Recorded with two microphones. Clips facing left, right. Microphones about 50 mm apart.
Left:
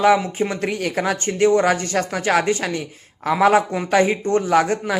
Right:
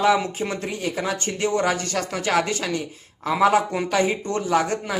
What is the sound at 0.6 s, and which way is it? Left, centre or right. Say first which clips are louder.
Speech: left 4 dB; left.